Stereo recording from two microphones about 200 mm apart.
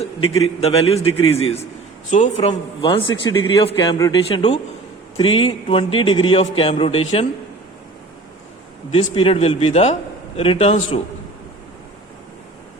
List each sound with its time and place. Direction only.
0.0 s a man's voice: 30° left (ahead or behind)
2.5 s a man's voice: 25° left (ahead or behind)
4.3 s a man's voice: 30° left (ahead or behind)
8.9 s a man's voice: 30° left (ahead or behind)